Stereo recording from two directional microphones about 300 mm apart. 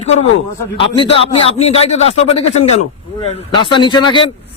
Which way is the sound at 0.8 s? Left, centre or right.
Centre.